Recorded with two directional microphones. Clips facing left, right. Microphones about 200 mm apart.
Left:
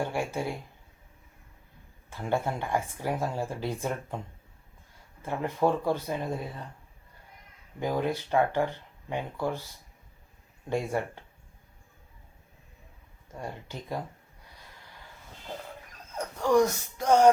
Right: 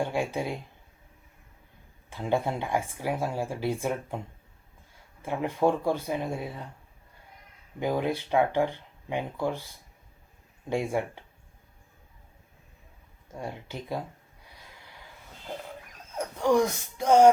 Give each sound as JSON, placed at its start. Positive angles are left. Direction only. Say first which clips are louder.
{"t": 0.0, "sound": "speech", "louder": "right 2 dB", "side_deg": -15}
{"t": 2.0, "sound": "speech", "louder": "right 2 dB", "side_deg": -15}
{"t": 5.2, "sound": "speech", "louder": "right 2 dB", "side_deg": -15}
{"t": 7.8, "sound": "speech", "louder": "right 1 dB", "side_deg": -15}
{"t": 10.7, "sound": "speech", "louder": "right 1 dB", "side_deg": -10}
{"t": 13.3, "sound": "speech", "louder": "right 2 dB", "side_deg": -15}
{"t": 16.1, "sound": "speech", "louder": "even", "side_deg": -10}